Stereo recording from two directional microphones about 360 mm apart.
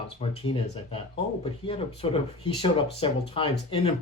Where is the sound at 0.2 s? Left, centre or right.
Centre.